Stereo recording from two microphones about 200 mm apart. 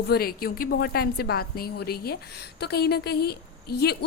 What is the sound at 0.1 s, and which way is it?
A woman's voice, 50° left (ahead or behind).